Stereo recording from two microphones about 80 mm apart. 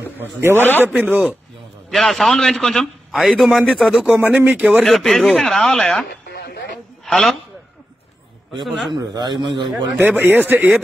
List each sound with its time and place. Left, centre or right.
0.2 s speech: right
0.6 s a man's voice: left
1.0 s speech: centre
1.9 s speech: centre
3.1 s a man's voice: centre
4.4 s speech: centre
4.8 s speech: centre
7.1 s a man's voice: centre
8.6 s speech: centre
8.9 s speech: right
9.9 s speech: right